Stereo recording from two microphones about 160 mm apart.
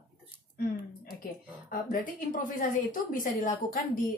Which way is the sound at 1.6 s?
60° left (ahead or behind).